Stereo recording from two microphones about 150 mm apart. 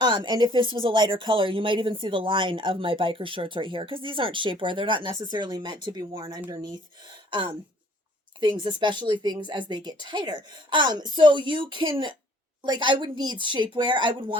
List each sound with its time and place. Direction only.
0.0 s speech: 30° right (ahead or behind)